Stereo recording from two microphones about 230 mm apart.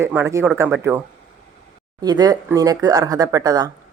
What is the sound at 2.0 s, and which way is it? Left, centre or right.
Speech, centre.